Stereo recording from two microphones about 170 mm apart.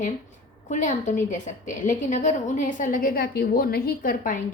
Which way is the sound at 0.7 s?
45° left (ahead or behind).